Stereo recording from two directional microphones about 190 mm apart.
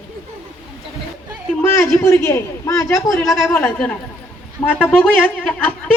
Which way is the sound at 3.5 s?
10° left (ahead or behind).